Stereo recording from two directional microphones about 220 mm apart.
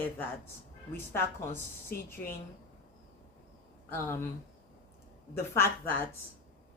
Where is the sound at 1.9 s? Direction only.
45° left (ahead or behind).